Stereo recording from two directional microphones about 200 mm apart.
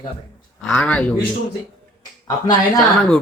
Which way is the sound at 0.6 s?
5° left (ahead or behind).